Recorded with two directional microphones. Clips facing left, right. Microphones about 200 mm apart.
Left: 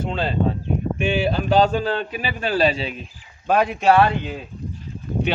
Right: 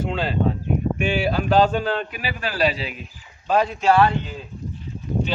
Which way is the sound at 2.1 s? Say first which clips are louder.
Left 4 dB; 25° left (ahead or behind).